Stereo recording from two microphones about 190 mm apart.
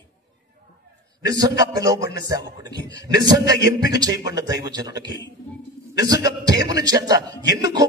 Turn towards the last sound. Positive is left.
turn(degrees=-20)  # may be behind; listen again after turning